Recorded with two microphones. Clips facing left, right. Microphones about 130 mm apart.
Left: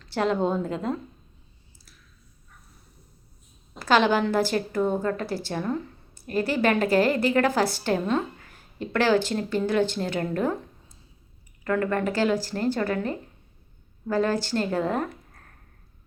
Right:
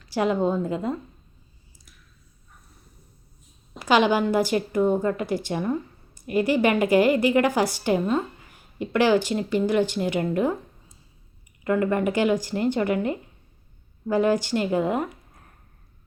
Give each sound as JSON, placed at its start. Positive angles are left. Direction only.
{"t": 0.0, "sound": "a woman's voice", "side_deg": -10}
{"t": 3.8, "sound": "a woman's voice", "side_deg": -15}
{"t": 11.6, "sound": "a woman's voice", "side_deg": -15}